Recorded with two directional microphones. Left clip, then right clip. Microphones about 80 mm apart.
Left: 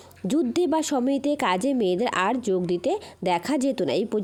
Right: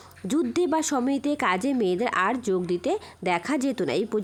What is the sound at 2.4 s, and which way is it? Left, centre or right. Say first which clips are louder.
A woman's voice: left 1 dB; left.